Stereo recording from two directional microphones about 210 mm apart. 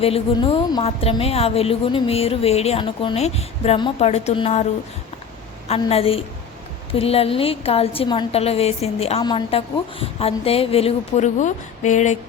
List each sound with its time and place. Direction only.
0.0 s a woman's voice: 25° left (ahead or behind)